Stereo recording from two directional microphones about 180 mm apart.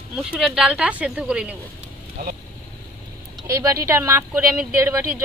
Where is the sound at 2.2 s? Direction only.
50° right (ahead or behind).